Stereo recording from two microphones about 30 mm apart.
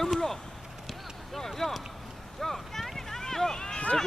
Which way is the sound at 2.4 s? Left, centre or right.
Centre.